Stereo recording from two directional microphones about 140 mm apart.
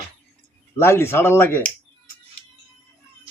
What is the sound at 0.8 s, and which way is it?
Speech, 15° left (ahead or behind).